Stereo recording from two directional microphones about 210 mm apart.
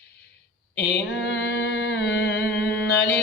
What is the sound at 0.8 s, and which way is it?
Mantra, 55° left (ahead or behind).